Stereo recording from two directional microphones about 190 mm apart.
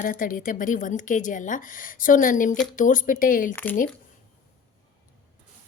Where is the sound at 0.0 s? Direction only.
45° left (ahead or behind).